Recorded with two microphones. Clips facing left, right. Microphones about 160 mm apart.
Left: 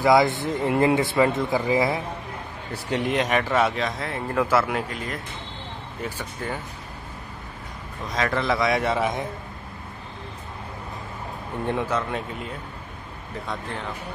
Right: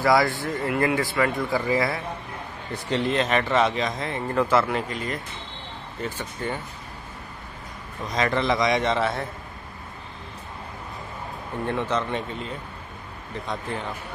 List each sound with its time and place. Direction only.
0.0 s speech: 20° left (ahead or behind); by 5.2 s 5° left (ahead or behind)
6.4 s a man's voice: 5° left (ahead or behind)
8.1 s a man's voice: centre (ahead or behind)
11.6 s speech: 15° left (ahead or behind)